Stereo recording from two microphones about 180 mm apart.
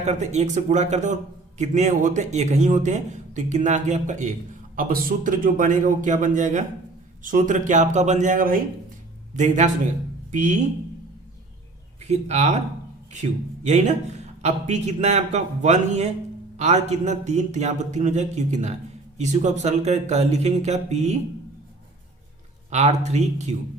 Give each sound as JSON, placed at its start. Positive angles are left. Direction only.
{"t": 0.0, "sound": "a man's voice", "side_deg": -40}
{"t": 12.0, "sound": "a man's voice", "side_deg": -35}
{"t": 22.7, "sound": "a man's voice", "side_deg": -40}